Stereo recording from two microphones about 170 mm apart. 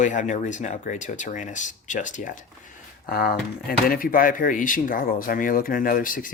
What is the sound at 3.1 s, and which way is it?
Speech, 60° left (ahead or behind).